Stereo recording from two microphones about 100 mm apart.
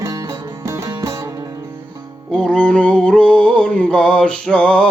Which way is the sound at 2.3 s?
10° left (ahead or behind).